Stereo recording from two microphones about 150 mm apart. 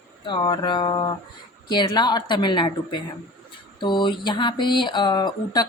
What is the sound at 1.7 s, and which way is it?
Speech, 30° left (ahead or behind).